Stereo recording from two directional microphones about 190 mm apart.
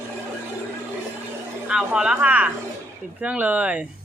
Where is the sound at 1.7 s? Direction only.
5° right (ahead or behind).